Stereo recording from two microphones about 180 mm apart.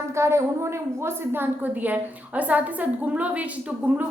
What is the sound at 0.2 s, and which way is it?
A woman's voice, 15° right (ahead or behind).